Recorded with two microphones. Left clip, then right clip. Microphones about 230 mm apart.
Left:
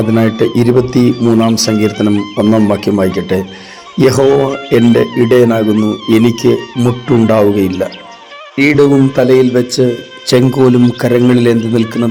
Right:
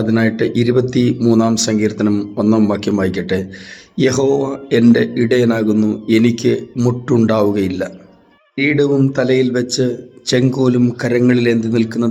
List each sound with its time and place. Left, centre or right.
0.1 s speech: centre
8.5 s speech: left